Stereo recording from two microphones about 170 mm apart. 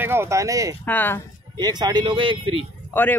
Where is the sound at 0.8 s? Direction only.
10° left (ahead or behind).